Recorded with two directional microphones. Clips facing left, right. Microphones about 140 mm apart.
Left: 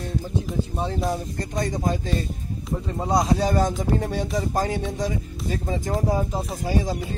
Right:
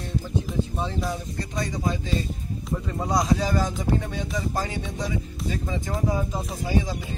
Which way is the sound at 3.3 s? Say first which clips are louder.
Left 3 dB; 40° left (ahead or behind).